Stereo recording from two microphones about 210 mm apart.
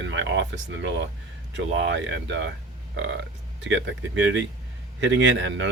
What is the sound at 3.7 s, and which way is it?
Speech, 60° right (ahead or behind).